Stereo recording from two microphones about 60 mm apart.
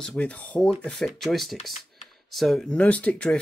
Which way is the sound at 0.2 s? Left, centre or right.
Left.